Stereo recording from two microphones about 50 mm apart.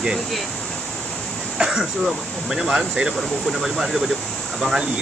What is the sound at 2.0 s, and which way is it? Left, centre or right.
Speech, centre.